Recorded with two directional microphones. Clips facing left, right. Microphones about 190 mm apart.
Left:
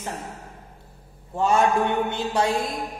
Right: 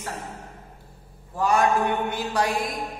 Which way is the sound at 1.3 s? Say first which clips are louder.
Left 1 dB; 25° left (ahead or behind).